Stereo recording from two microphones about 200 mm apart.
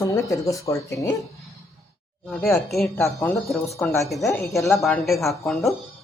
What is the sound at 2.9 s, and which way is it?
Speech, 15° left (ahead or behind).